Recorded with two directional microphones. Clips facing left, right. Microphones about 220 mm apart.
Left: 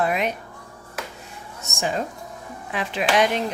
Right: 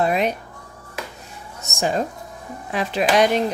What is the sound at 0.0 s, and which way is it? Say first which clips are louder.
Speech: right 3 dB; 35° right (ahead or behind).